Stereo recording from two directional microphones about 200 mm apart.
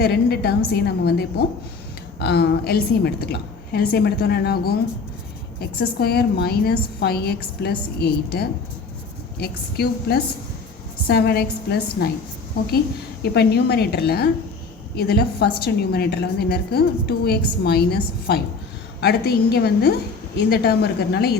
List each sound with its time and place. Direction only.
0.0 s a woman's voice: 55° left (ahead or behind)
13.2 s a woman's voice: 55° left (ahead or behind)